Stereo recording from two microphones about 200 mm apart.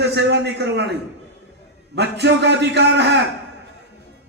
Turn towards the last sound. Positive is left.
turn(degrees=-60)  # may be behind; listen again after turning